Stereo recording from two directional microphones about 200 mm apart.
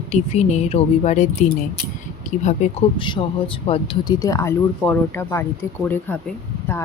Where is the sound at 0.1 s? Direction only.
35° left (ahead or behind).